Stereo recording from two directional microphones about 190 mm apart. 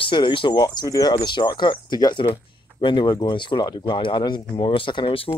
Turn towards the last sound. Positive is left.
turn(degrees=25)  # may be behind; listen again after turning